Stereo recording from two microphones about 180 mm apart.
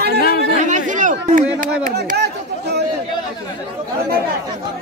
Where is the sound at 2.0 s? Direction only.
65° right (ahead or behind).